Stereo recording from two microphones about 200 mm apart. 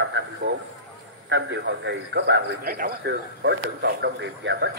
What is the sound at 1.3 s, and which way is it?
A man's voice, 60° right (ahead or behind).